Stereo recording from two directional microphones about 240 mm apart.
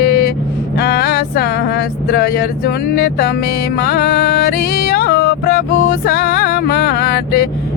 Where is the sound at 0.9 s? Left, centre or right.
Left.